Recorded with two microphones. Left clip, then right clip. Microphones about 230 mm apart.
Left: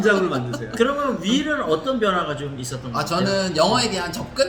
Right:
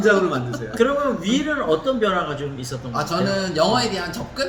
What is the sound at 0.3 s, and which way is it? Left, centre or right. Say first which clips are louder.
Speech: even; centre.